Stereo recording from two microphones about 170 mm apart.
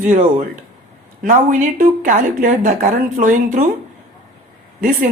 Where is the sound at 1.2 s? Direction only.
50° right (ahead or behind).